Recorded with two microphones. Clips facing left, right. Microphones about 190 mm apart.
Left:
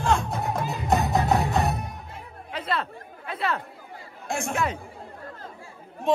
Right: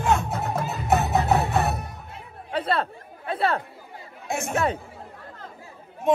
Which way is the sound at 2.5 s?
30° right (ahead or behind).